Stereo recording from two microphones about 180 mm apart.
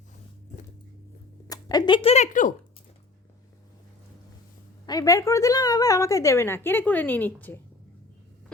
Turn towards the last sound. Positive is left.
turn(degrees=10)  # may be behind; listen again after turning